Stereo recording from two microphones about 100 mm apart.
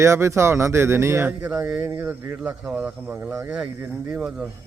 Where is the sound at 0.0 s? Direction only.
30° right (ahead or behind).